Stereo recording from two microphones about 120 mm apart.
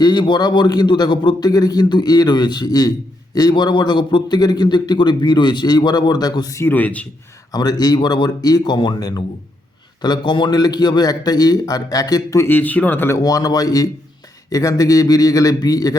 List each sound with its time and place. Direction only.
0.0 s a man's voice: 35° left (ahead or behind); by 7.1 s 10° left (ahead or behind)
7.5 s a man's voice: 35° left (ahead or behind)
12.5 s a man's voice: 15° left (ahead or behind); by 16.0 s 30° left (ahead or behind)